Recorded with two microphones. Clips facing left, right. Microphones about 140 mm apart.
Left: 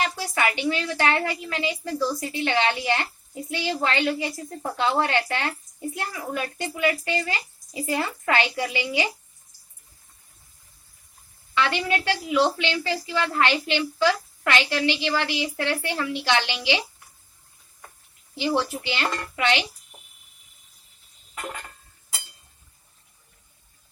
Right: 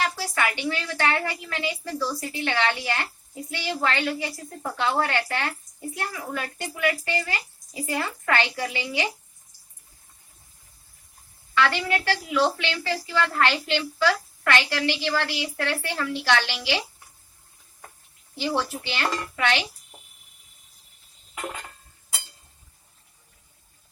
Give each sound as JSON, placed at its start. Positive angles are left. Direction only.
{"t": 0.0, "sound": "a woman's voice", "side_deg": 20}
{"t": 11.5, "sound": "a woman's voice", "side_deg": 20}
{"t": 18.3, "sound": "a woman's voice", "side_deg": 20}